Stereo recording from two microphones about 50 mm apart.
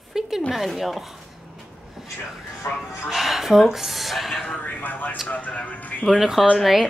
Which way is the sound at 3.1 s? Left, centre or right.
Centre.